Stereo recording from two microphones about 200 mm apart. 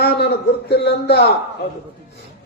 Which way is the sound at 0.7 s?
55° left (ahead or behind).